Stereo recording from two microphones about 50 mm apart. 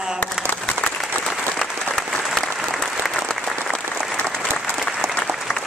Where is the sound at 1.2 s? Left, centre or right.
Centre.